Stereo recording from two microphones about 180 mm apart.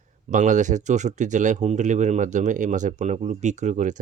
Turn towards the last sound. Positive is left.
turn(degrees=-40)  # may be behind; listen again after turning